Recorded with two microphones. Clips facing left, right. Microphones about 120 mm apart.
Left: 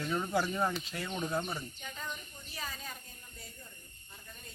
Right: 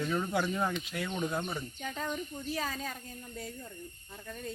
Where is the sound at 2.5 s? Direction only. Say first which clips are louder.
Right 6 dB; 90° right.